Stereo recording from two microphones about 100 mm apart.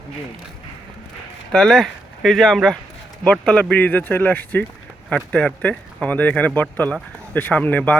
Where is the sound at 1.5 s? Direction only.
5° left (ahead or behind).